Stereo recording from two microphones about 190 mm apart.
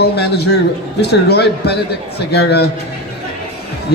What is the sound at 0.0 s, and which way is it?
A man's voice, 60° left (ahead or behind).